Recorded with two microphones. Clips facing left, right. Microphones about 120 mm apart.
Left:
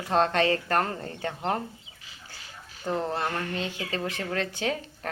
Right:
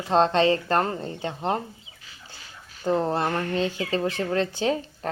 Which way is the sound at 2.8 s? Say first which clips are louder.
Right 5 dB; 35° right (ahead or behind).